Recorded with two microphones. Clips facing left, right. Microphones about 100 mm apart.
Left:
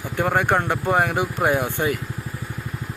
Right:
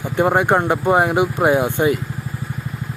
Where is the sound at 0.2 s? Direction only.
20° right (ahead or behind).